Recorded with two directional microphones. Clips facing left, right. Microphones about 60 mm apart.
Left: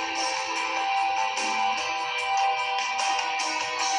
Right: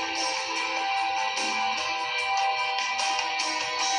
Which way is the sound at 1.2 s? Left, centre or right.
Centre.